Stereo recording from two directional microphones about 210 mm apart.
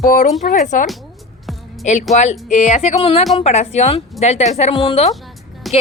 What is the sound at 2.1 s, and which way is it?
Speech, 30° left (ahead or behind).